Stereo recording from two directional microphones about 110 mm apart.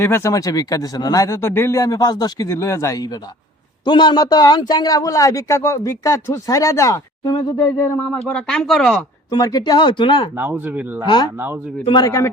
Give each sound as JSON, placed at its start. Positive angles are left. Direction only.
{"t": 0.0, "sound": "speech", "side_deg": 25}
{"t": 3.8, "sound": "a man's voice", "side_deg": 45}
{"t": 8.3, "sound": "speech", "side_deg": 5}
{"t": 9.3, "sound": "a man's voice", "side_deg": 35}
{"t": 10.3, "sound": "speech", "side_deg": -20}
{"t": 11.0, "sound": "a man's voice", "side_deg": 40}